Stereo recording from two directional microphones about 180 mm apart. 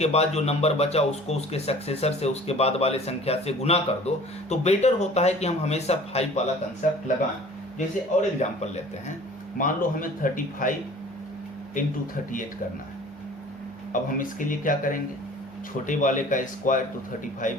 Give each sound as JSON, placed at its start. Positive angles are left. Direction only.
{"t": 0.0, "sound": "speech", "side_deg": 35}
{"t": 7.8, "sound": "speech", "side_deg": 40}
{"t": 13.9, "sound": "speech", "side_deg": 50}